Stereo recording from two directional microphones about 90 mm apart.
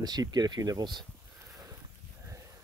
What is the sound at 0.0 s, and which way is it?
Speech, 50° right (ahead or behind).